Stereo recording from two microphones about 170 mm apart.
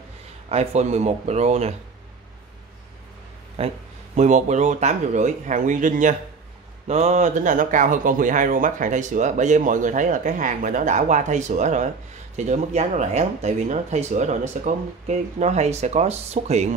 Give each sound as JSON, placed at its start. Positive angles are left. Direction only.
{"t": 0.5, "sound": "speech", "side_deg": -40}
{"t": 3.6, "sound": "speech", "side_deg": -35}